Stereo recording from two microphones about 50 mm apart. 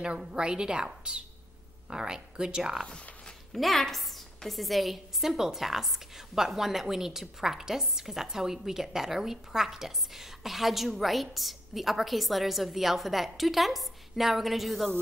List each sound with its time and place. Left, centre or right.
0.3 s a woman's voice: centre
3.5 s a woman's voice: centre